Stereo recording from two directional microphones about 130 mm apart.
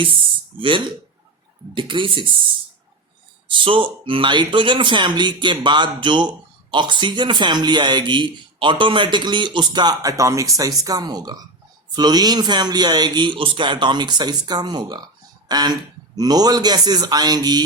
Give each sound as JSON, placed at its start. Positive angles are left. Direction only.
{"t": 0.6, "sound": "speech", "side_deg": -40}
{"t": 3.5, "sound": "speech", "side_deg": -40}